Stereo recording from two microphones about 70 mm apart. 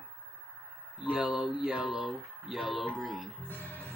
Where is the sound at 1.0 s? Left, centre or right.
Centre.